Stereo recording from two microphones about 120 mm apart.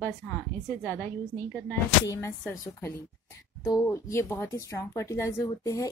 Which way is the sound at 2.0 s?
25° left (ahead or behind).